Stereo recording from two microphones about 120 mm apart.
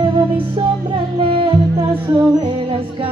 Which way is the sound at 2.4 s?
45° right (ahead or behind).